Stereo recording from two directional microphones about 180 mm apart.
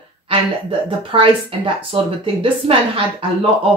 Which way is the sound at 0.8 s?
30° right (ahead or behind).